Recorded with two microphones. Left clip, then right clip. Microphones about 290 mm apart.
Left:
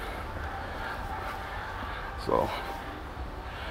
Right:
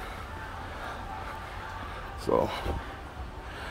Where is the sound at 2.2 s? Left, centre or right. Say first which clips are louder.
Right 1 dB; right.